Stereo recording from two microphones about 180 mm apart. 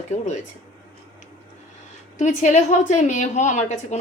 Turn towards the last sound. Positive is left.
turn(degrees=40)  # may be behind; listen again after turning